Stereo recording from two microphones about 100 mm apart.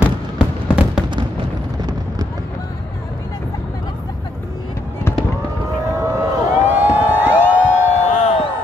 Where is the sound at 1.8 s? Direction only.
40° right (ahead or behind).